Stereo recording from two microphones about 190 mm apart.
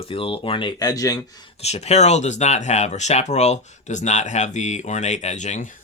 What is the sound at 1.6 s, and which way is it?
Speech, 35° left (ahead or behind).